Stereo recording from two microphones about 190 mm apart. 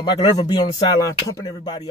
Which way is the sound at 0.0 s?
20° left (ahead or behind).